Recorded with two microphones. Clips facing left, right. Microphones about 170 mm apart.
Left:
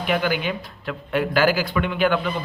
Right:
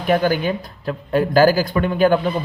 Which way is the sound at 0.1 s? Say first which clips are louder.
Right 6 dB; 40° right (ahead or behind).